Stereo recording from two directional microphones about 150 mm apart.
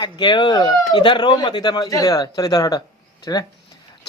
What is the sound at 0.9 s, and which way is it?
Speech, 30° left (ahead or behind).